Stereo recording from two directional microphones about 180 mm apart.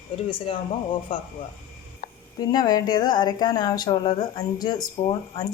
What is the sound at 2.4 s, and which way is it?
A woman's voice, 20° left (ahead or behind).